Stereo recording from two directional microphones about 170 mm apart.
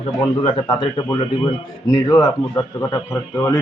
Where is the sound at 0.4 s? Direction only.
25° left (ahead or behind).